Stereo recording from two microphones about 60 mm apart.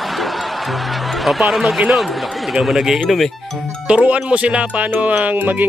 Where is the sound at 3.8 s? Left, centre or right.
Centre.